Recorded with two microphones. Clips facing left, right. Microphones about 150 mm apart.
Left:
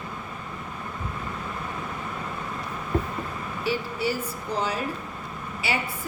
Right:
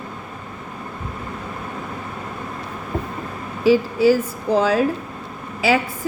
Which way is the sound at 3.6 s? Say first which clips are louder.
Right 13 dB; 90° right.